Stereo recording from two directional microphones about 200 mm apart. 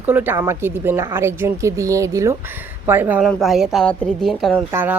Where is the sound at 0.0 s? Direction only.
10° right (ahead or behind).